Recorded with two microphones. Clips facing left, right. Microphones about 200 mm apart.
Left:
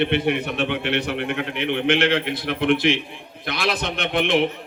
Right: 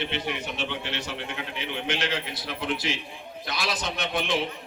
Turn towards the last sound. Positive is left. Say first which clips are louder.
# left 7 dB
turn(degrees=60)  # may be behind; listen again after turning